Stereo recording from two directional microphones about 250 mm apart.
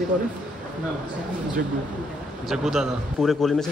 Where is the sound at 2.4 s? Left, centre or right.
Centre.